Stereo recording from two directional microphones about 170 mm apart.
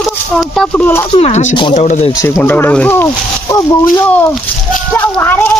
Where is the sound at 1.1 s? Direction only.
40° left (ahead or behind).